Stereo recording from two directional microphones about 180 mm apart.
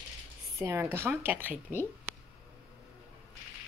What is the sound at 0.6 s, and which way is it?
Speech, 15° right (ahead or behind).